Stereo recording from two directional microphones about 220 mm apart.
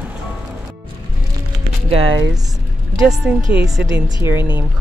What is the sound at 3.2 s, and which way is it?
Speech, 5° right (ahead or behind).